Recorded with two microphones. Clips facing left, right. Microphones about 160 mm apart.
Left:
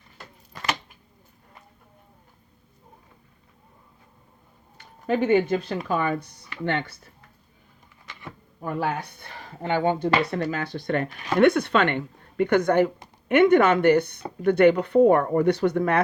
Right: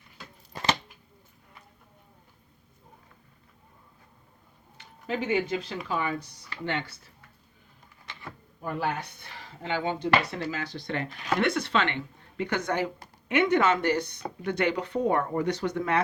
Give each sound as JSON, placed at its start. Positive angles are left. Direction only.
{"t": 0.5, "sound": "a sound", "side_deg": -30}
{"t": 4.8, "sound": "speech", "side_deg": 55}
{"t": 9.4, "sound": "speech", "side_deg": 50}